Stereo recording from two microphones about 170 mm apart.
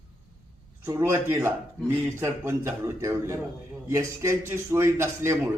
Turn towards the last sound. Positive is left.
turn(degrees=-15)  # may be behind; listen again after turning